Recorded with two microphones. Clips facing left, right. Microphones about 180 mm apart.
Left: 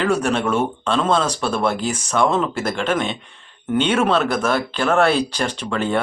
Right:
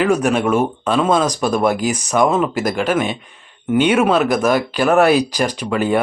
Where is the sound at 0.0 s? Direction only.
10° right (ahead or behind).